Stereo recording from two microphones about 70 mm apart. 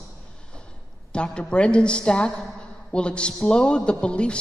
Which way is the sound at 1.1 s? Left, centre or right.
Centre.